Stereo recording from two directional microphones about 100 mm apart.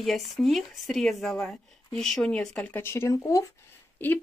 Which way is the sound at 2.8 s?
25° left (ahead or behind).